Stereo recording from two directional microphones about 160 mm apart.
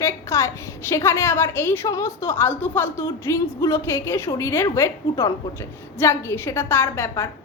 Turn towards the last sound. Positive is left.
turn(degrees=15)  # may be behind; listen again after turning